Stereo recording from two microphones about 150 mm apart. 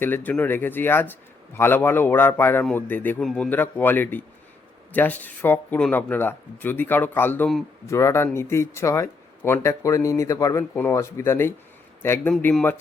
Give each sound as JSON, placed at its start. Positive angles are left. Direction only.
{"t": 0.0, "sound": "speech", "side_deg": 10}